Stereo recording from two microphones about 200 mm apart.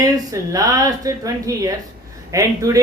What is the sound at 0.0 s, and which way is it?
Speech, 20° right (ahead or behind).